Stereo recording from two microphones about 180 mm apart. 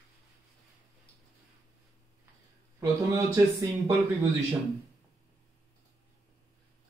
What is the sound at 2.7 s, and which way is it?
A man's voice, 15° right (ahead or behind).